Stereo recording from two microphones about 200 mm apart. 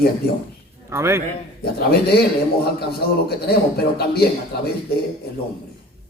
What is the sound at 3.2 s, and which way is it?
A man's voice, 50° left (ahead or behind).